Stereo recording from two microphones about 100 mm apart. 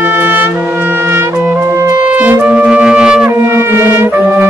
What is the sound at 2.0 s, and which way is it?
Music, 15° right (ahead or behind).